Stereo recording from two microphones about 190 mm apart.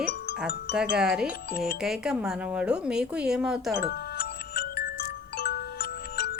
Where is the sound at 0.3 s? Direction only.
5° right (ahead or behind).